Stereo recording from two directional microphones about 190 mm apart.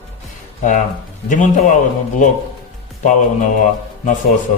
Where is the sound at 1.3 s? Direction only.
40° left (ahead or behind).